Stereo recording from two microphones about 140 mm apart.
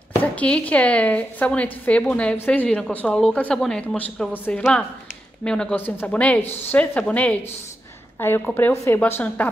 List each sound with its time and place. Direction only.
0.2 s a woman's voice: 10° left (ahead or behind)